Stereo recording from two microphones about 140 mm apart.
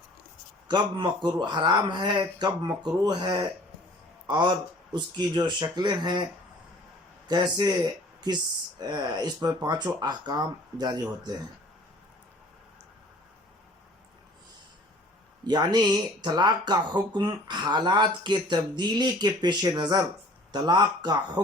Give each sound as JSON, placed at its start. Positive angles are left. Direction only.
{"t": 0.7, "sound": "speech", "side_deg": -30}
{"t": 7.3, "sound": "speech", "side_deg": -30}
{"t": 8.9, "sound": "speech", "side_deg": -30}
{"t": 15.4, "sound": "speech", "side_deg": -30}